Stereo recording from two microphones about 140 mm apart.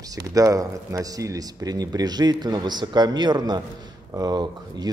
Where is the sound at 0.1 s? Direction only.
25° right (ahead or behind).